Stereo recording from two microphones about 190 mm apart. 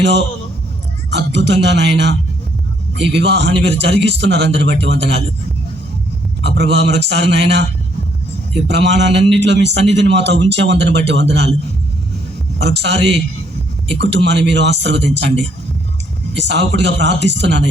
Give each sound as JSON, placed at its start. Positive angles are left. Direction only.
{"t": 0.0, "sound": "a man's voice", "side_deg": -65}
{"t": 6.4, "sound": "a man's voice", "side_deg": -60}
{"t": 12.5, "sound": "a man's voice", "side_deg": -65}